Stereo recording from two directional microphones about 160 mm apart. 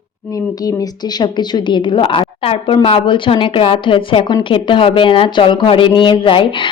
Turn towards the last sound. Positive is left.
turn(degrees=30)  # may be behind; listen again after turning